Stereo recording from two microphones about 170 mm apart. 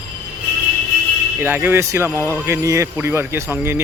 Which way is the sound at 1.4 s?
10° right (ahead or behind).